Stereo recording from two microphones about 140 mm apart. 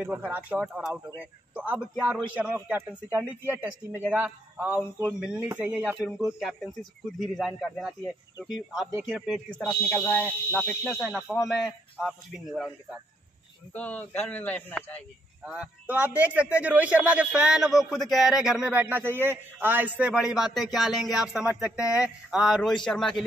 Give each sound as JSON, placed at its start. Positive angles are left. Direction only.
{"t": 0.0, "sound": "a man's voice", "side_deg": -10}
{"t": 8.0, "sound": "speech", "side_deg": 30}
{"t": 9.0, "sound": "speech", "side_deg": 0}
{"t": 10.9, "sound": "speech", "side_deg": 0}
{"t": 13.7, "sound": "a man's voice", "side_deg": 10}
{"t": 15.4, "sound": "a man's voice", "side_deg": -10}